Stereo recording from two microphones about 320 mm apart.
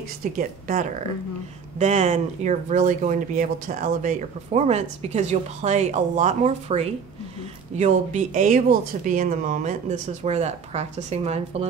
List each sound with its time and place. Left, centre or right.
0.2 s speech: right